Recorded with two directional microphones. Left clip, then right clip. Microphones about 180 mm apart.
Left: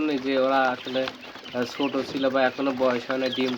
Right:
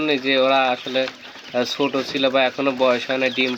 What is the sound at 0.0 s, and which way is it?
Speech, 35° right (ahead or behind).